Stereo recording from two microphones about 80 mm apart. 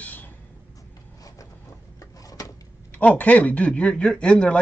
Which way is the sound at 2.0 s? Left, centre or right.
Left.